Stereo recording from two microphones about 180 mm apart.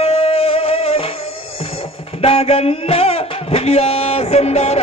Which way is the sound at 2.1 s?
35° left (ahead or behind).